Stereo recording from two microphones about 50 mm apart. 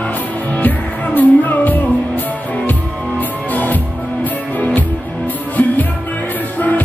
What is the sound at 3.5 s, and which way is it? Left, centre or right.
Music, left.